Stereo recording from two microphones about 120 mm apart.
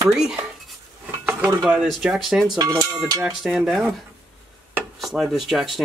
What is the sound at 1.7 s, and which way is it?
Speech, 5° right (ahead or behind).